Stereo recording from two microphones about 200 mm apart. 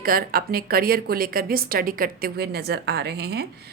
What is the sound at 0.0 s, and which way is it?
A woman's voice, 45° right (ahead or behind).